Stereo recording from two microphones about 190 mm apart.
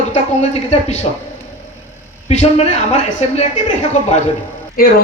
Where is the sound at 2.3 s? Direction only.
35° left (ahead or behind).